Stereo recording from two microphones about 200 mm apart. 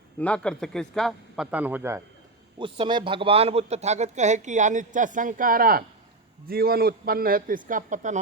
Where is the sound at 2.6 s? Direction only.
25° right (ahead or behind).